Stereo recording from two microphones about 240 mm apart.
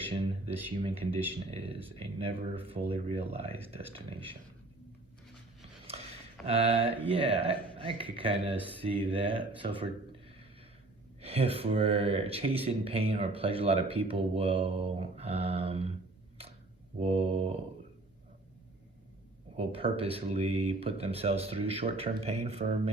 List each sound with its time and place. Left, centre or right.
0.0 s speech: right
6.4 s speech: right
11.2 s speech: right
17.0 s speech: right
19.5 s speech: right